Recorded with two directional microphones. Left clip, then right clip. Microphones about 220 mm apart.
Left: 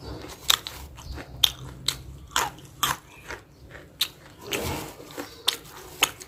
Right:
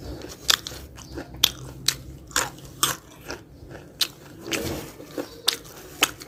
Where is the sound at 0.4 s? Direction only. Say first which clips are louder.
Right 1 dB; 15° right (ahead or behind).